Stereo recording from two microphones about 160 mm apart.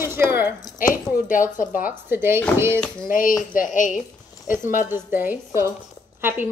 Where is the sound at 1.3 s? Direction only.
55° left (ahead or behind).